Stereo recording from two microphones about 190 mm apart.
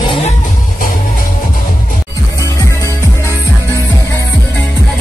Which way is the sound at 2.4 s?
15° left (ahead or behind).